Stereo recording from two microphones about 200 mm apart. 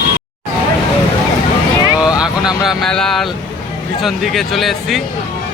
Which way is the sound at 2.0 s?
5° right (ahead or behind).